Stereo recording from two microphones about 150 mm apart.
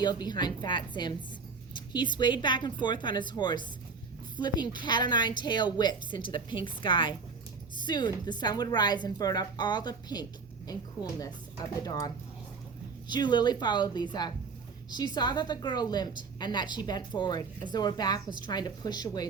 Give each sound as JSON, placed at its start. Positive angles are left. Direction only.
{"t": 0.0, "sound": "a woman's voice", "side_deg": 30}
{"t": 11.8, "sound": "a woman's voice", "side_deg": 25}